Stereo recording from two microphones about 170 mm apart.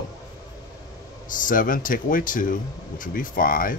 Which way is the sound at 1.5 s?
55° left (ahead or behind).